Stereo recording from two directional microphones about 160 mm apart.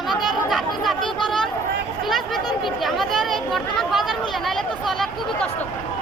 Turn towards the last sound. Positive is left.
turn(degrees=0)  # may be behind; listen again after turning